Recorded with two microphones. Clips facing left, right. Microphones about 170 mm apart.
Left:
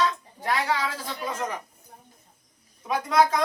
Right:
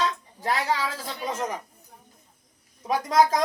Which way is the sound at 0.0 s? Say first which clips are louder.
Left 1 dB; 30° right (ahead or behind).